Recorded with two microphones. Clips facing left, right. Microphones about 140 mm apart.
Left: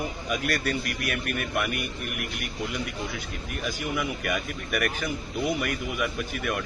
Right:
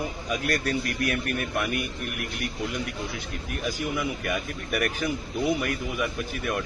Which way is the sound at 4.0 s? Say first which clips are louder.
Even; 30° right (ahead or behind).